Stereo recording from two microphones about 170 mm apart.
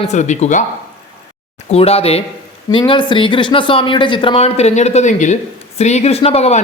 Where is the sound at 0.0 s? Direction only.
45° left (ahead or behind).